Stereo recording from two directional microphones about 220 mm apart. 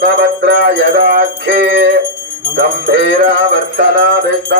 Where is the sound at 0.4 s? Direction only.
50° right (ahead or behind).